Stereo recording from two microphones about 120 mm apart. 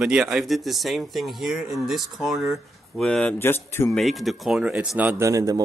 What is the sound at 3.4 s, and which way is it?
Speech, 20° left (ahead or behind).